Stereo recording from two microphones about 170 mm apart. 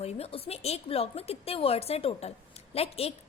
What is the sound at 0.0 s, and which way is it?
A woman's voice, 35° left (ahead or behind).